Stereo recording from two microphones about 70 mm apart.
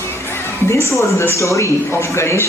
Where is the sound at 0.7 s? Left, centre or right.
Left.